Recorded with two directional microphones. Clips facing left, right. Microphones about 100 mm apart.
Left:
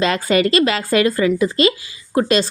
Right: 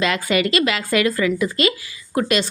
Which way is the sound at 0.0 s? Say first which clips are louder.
Left 3 dB; 35° left (ahead or behind).